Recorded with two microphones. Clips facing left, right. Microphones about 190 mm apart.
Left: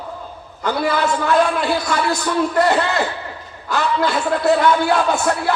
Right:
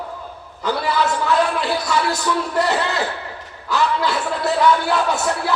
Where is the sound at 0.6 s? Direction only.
50° left (ahead or behind).